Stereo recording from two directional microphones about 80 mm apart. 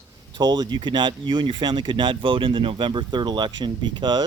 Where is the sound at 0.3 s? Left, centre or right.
Right.